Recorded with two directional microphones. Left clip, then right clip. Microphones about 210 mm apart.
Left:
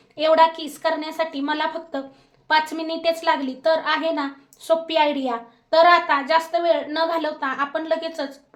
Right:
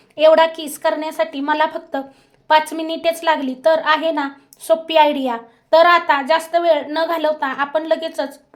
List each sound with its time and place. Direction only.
0.2 s a woman's voice: 30° right (ahead or behind)